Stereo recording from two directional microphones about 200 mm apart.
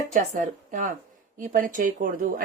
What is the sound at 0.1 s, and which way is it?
Speech, 40° right (ahead or behind).